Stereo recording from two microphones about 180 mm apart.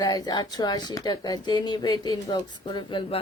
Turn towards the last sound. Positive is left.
turn(degrees=25)  # may be behind; listen again after turning